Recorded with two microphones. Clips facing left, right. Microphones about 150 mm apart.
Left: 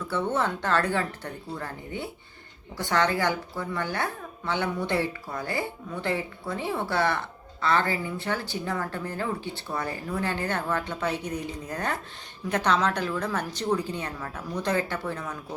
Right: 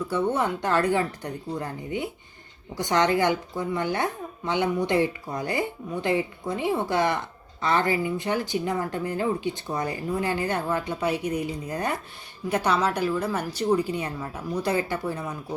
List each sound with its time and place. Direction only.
0.1 s speech: 15° right (ahead or behind)